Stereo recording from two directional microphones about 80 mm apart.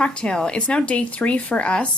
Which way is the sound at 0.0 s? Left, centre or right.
Centre.